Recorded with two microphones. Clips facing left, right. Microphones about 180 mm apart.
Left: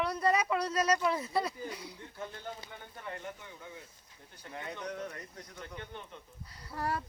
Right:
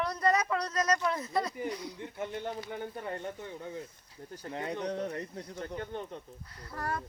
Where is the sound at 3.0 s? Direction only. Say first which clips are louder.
Right 5 dB; 35° right (ahead or behind).